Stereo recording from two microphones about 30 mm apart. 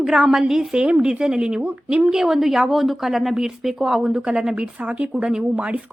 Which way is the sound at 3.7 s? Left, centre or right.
Centre.